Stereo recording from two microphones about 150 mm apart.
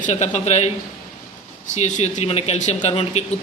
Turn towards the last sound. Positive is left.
turn(degrees=45)  # may be behind; listen again after turning